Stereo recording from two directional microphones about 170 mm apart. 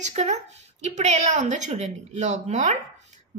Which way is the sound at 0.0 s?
45° right (ahead or behind).